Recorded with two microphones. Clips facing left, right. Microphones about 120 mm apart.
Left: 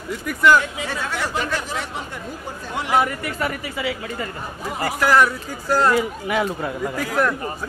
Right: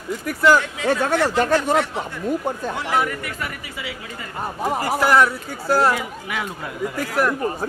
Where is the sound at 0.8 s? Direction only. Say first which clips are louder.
Right 7 dB; 50° right (ahead or behind).